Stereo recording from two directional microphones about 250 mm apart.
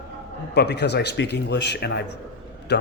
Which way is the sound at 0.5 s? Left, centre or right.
Left.